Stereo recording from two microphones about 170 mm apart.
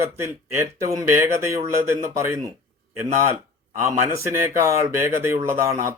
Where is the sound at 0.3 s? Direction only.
15° right (ahead or behind).